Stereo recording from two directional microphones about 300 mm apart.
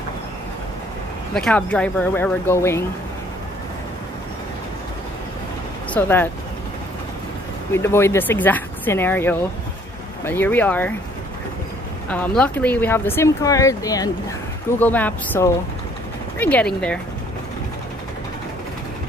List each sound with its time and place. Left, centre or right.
1.3 s speech: centre
5.9 s speech: centre
7.7 s speech: centre
12.1 s speech: centre